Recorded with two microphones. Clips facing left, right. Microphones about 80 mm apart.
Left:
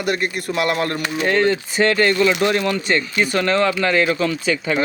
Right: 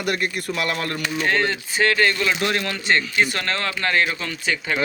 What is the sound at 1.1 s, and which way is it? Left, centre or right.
Speech, centre.